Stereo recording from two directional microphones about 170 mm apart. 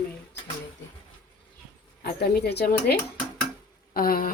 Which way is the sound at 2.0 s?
70° left (ahead or behind).